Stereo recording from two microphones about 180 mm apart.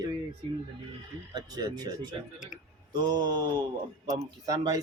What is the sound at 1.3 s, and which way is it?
Speech, 20° right (ahead or behind).